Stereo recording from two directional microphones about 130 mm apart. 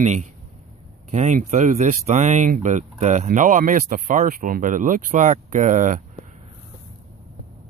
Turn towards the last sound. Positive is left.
turn(degrees=-80)